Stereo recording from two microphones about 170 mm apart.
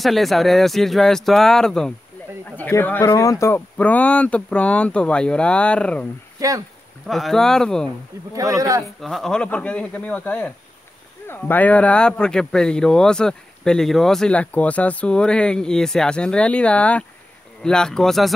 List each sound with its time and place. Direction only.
0.0 s speech: centre (ahead or behind)
7.1 s speech: centre (ahead or behind)
8.4 s speech: 20° right (ahead or behind)
9.0 s speech: centre (ahead or behind)